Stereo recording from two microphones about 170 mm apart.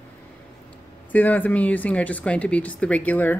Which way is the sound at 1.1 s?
10° left (ahead or behind).